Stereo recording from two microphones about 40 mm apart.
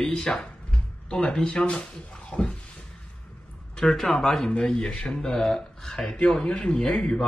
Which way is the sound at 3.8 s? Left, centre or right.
Centre.